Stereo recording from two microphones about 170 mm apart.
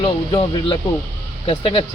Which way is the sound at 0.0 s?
30° left (ahead or behind).